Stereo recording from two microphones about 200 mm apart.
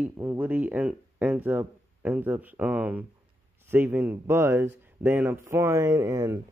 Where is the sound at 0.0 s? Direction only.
10° right (ahead or behind).